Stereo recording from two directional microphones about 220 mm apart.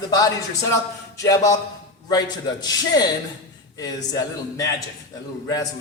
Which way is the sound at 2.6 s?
15° left (ahead or behind).